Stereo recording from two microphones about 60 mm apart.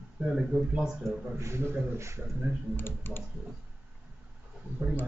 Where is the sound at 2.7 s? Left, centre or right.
Left.